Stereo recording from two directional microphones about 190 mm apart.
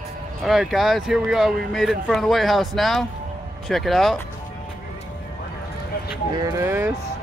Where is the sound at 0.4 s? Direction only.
Centre (ahead or behind).